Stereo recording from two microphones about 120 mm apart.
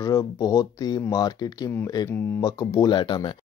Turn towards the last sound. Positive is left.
turn(degrees=40)  # may be behind; listen again after turning